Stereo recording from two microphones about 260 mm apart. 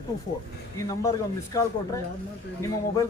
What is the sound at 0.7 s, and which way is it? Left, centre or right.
Speech, centre.